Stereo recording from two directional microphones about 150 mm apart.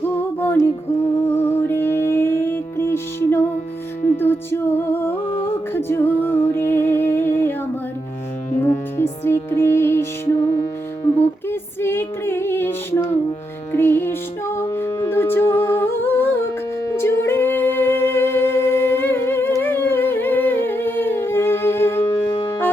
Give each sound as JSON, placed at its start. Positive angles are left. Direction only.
{"t": 0.3, "sound": "music", "side_deg": 15}
{"t": 8.5, "sound": "music", "side_deg": 15}
{"t": 16.9, "sound": "singing", "side_deg": 15}
{"t": 22.2, "sound": "music", "side_deg": 35}
{"t": 22.4, "sound": "music", "side_deg": 20}